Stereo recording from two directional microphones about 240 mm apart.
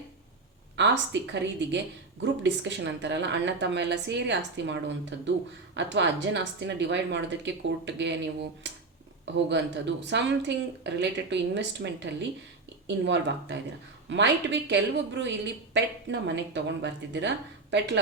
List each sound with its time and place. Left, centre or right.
0.8 s a woman's voice: right
13.1 s a woman's voice: right